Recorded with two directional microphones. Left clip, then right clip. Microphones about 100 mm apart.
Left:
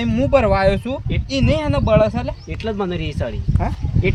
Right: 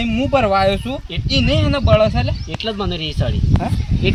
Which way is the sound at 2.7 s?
40° left (ahead or behind).